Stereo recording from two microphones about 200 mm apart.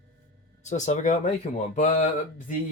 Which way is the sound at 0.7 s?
35° left (ahead or behind).